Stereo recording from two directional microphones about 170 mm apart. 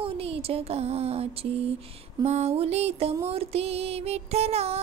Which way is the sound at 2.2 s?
40° right (ahead or behind).